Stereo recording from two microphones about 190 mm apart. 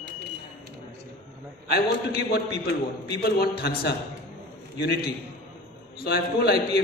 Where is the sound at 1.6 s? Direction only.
55° left (ahead or behind).